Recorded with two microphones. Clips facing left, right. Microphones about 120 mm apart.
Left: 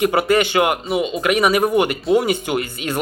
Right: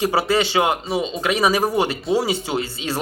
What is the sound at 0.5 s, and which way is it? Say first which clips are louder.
Speech: left 2 dB; 25° right (ahead or behind).